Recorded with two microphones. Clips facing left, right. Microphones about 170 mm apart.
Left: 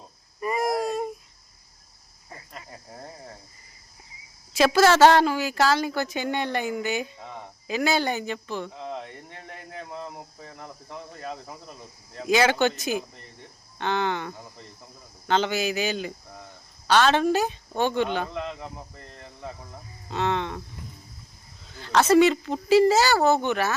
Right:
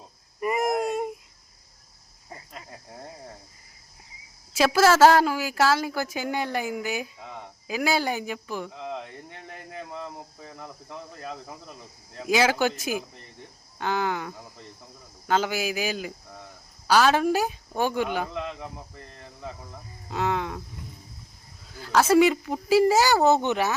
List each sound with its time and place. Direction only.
0.3 s a sound: 20° right (ahead or behind)
4.5 s a woman's voice: 5° right (ahead or behind)
20.1 s speech: 10° right (ahead or behind)
21.7 s speech: 5° right (ahead or behind)